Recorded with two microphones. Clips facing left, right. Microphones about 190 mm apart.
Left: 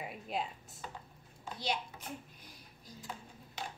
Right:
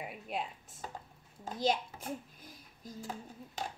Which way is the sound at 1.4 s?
45° right (ahead or behind).